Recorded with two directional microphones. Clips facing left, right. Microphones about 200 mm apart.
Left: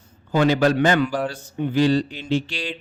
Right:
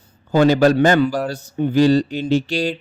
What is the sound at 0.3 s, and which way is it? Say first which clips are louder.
A man's voice: right 4 dB; 40° right (ahead or behind).